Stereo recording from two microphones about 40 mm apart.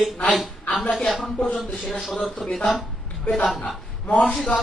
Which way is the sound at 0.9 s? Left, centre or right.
Centre.